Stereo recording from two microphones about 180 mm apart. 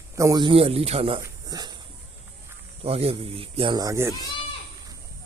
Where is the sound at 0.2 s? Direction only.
20° right (ahead or behind).